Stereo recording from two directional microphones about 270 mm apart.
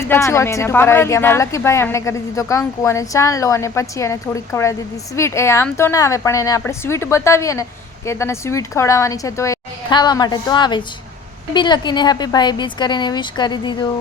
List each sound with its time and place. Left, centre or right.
0.0 s speech: centre